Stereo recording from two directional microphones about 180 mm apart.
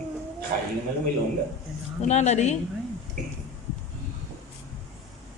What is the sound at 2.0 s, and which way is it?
Speech, 40° left (ahead or behind).